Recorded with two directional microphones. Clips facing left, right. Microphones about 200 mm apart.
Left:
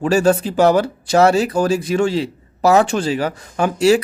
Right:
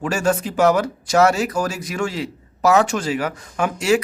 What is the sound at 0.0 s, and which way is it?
Speech, 35° left (ahead or behind).